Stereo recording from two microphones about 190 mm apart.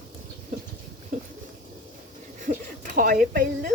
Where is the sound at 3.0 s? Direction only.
45° right (ahead or behind).